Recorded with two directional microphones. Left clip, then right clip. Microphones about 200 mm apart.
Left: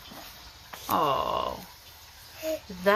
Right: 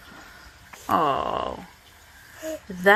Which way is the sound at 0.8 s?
30° right (ahead or behind).